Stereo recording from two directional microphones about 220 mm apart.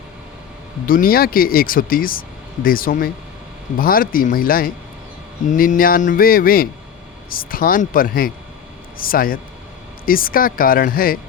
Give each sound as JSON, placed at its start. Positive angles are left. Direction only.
{"t": 0.9, "sound": "speech", "side_deg": 40}